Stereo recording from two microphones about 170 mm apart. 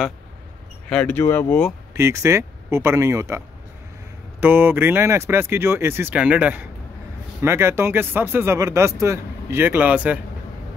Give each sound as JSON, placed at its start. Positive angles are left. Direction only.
{"t": 0.8, "sound": "speech", "side_deg": 10}
{"t": 2.0, "sound": "speech", "side_deg": -15}